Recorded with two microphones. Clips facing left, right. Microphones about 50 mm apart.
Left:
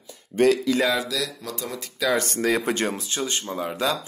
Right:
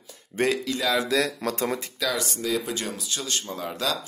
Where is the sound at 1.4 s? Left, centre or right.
Right.